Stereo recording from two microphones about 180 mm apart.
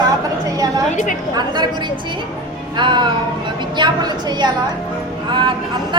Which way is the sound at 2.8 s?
25° right (ahead or behind).